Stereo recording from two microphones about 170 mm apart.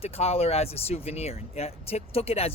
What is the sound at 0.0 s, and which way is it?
Speech, 35° left (ahead or behind).